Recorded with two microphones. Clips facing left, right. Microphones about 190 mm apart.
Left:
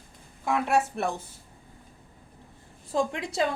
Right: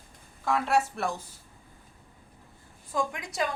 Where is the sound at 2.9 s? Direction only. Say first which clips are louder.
Left 4 dB; 30° left (ahead or behind).